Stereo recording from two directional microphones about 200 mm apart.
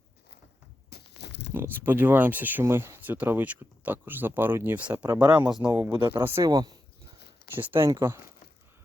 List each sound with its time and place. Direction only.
0.9 s a sound: 55° left (ahead or behind)
1.5 s speech: 10° right (ahead or behind)
5.5 s speech: 20° right (ahead or behind)
6.1 s speech: 10° right (ahead or behind)